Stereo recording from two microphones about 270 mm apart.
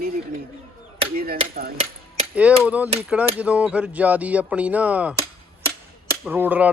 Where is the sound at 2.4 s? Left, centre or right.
Centre.